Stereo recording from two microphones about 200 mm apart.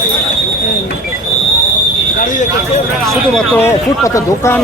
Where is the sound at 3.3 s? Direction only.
15° left (ahead or behind).